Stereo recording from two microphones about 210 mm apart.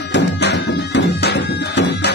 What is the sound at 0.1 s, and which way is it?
Music, 55° left (ahead or behind).